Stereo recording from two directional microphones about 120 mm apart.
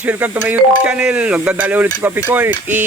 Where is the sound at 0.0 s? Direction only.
15° right (ahead or behind).